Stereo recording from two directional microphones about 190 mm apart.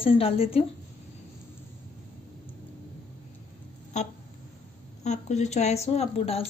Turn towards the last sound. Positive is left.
turn(degrees=30)  # may be behind; listen again after turning